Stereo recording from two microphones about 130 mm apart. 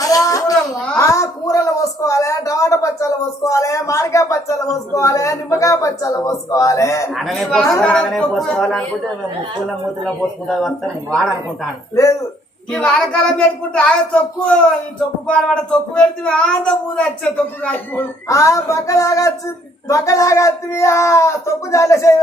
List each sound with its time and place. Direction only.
0.0 s a sound: 25° left (ahead or behind)
0.9 s a woman's voice: 25° left (ahead or behind)
7.1 s a man's voice: centre (ahead or behind)
10.5 s a man's voice: 5° left (ahead or behind)
12.7 s a man's voice: 5° left (ahead or behind)
15.3 s speech: 5° left (ahead or behind)
18.3 s speech: 25° left (ahead or behind)